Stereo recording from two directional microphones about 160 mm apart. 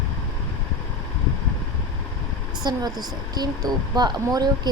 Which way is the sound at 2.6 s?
25° right (ahead or behind).